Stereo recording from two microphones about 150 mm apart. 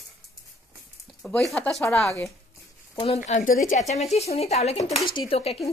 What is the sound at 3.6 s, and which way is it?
Speech, 50° left (ahead or behind).